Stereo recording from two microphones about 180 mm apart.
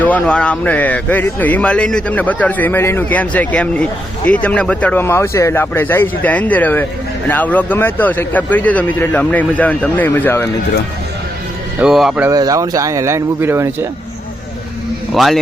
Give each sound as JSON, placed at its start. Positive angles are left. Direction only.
{"t": 0.0, "sound": "speech", "side_deg": 5}
{"t": 11.8, "sound": "speech", "side_deg": 0}
{"t": 12.3, "sound": "speech", "side_deg": -20}
{"t": 15.1, "sound": "a man's voice", "side_deg": 0}